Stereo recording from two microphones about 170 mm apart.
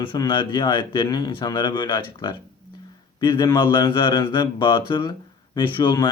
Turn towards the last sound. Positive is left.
turn(degrees=25)  # may be behind; listen again after turning